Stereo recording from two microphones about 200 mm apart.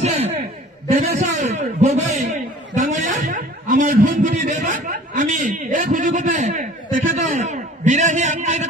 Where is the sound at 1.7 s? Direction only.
35° right (ahead or behind).